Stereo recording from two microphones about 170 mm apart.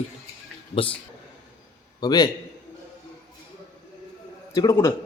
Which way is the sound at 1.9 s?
25° left (ahead or behind).